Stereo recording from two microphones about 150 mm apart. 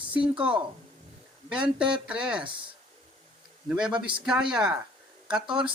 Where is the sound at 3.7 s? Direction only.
5° right (ahead or behind).